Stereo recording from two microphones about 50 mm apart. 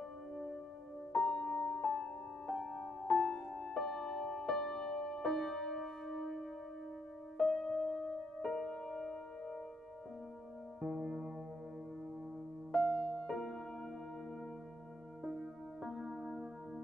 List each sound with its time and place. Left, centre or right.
1.1 s music: centre
10.8 s music: centre
12.7 s music: centre
15.2 s music: centre